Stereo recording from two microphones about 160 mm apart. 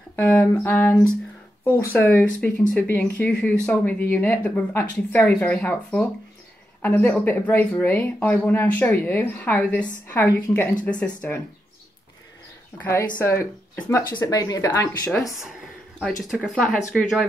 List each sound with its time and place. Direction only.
0.1 s speech: 10° left (ahead or behind)
12.7 s speech: 15° left (ahead or behind)
16.3 s speech: centre (ahead or behind)